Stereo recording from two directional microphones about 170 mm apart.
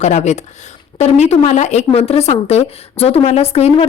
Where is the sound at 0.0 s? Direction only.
40° left (ahead or behind).